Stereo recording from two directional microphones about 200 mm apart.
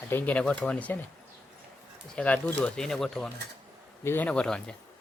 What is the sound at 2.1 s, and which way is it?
Speech, 5° left (ahead or behind).